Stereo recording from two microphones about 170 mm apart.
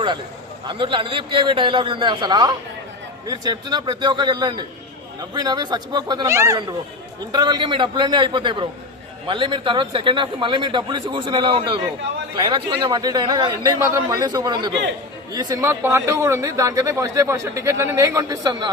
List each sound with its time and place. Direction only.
0.7 s a man's voice: 30° right (ahead or behind)